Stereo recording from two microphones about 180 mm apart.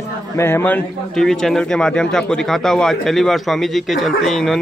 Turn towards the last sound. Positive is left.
turn(degrees=0)  # may be behind; listen again after turning